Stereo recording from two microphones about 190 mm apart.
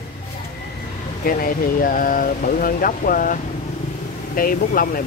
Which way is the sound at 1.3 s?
50° left (ahead or behind).